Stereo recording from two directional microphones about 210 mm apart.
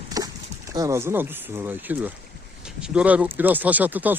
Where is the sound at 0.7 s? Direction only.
15° right (ahead or behind).